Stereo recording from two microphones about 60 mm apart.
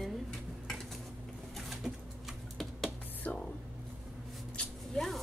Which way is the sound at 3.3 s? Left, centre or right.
Left.